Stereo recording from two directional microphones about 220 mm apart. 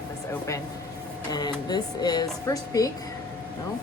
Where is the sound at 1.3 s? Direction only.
20° left (ahead or behind).